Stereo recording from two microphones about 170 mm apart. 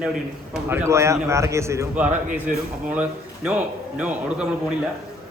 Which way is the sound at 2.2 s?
55° right (ahead or behind).